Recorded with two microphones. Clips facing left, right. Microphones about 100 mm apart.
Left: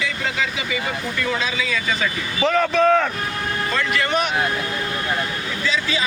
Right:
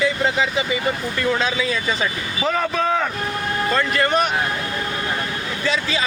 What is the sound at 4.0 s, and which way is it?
Speech, 40° right (ahead or behind).